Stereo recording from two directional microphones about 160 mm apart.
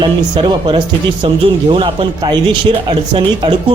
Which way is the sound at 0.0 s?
30° right (ahead or behind).